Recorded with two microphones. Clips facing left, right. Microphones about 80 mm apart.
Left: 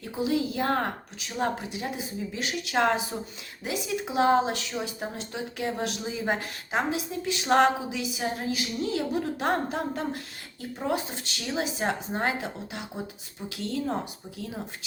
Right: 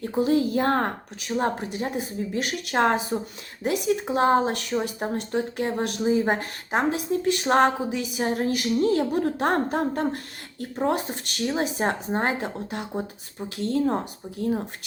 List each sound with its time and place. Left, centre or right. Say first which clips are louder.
0.0 s a woman's voice: right 5 dB; right
11.4 s a woman's voice: right 4 dB; right